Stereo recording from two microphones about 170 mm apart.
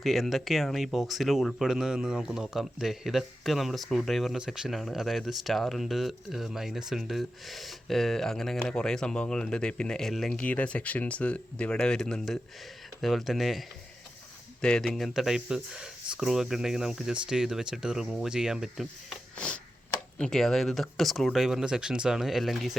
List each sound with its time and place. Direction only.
0.0 s speech: centre (ahead or behind)
20.1 s speech: 5° left (ahead or behind)